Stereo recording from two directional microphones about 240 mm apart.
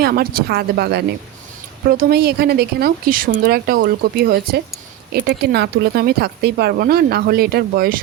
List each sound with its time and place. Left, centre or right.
0.0 s speech: right